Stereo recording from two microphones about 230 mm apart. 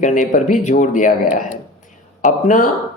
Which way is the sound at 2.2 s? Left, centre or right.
Left.